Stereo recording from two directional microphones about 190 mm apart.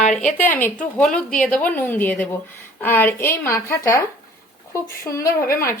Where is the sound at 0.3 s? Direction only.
10° left (ahead or behind).